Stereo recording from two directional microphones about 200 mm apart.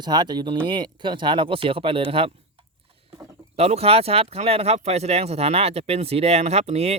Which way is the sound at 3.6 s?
30° right (ahead or behind).